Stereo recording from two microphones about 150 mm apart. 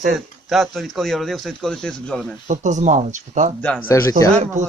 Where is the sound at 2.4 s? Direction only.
55° right (ahead or behind).